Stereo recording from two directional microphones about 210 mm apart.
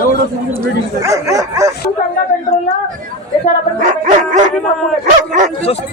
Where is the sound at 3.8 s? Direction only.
35° right (ahead or behind).